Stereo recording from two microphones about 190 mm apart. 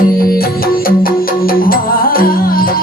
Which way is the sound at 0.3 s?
50° left (ahead or behind).